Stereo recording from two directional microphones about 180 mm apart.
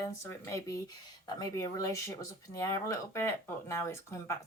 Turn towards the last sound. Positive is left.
turn(degrees=15)  # may be behind; listen again after turning